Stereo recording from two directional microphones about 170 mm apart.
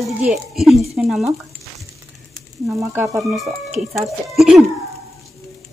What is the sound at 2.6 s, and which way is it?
Sizzle, 10° right (ahead or behind).